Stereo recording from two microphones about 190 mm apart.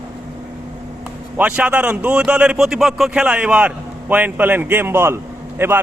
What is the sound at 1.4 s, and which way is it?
A man's voice, 10° right (ahead or behind).